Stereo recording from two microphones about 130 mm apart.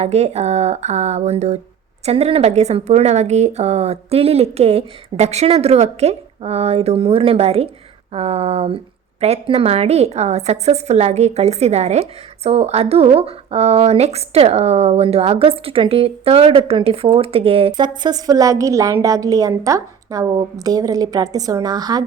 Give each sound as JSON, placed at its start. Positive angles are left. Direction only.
{"t": 0.0, "sound": "a woman's voice", "side_deg": -55}